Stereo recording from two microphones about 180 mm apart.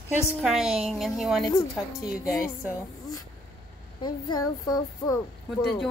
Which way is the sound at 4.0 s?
25° left (ahead or behind).